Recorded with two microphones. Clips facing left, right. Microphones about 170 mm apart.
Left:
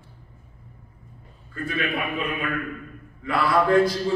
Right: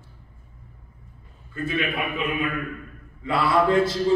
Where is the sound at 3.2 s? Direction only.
25° right (ahead or behind).